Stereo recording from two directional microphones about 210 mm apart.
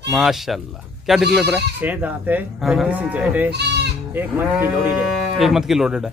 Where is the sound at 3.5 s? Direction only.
55° right (ahead or behind).